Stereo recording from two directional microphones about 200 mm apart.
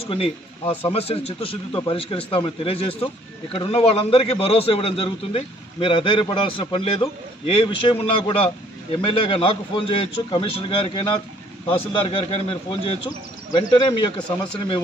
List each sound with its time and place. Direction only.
0.0 s a man's voice: 25° left (ahead or behind)